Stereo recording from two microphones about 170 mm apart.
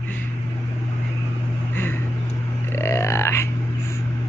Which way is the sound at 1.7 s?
15° left (ahead or behind).